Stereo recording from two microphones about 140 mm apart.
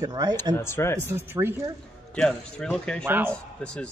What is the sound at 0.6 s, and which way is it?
Speech, 15° left (ahead or behind).